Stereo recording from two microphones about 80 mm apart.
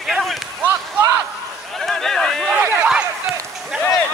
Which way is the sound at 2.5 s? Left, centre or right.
Right.